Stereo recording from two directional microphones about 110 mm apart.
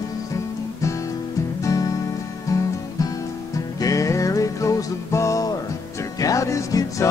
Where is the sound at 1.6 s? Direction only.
30° left (ahead or behind).